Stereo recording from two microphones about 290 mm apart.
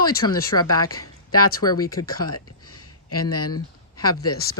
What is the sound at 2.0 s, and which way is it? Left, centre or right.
Speech, left.